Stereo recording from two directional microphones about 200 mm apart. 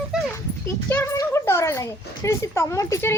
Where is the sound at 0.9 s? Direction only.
10° left (ahead or behind).